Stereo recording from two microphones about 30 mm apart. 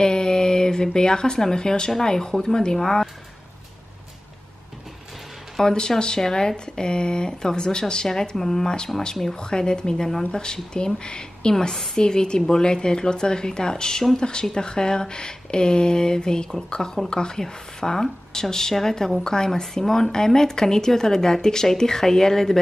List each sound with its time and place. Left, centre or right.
0.0 s mantra: left
0.9 s speech: left
5.6 s speech: left
8.4 s speech: centre
9.4 s speech: left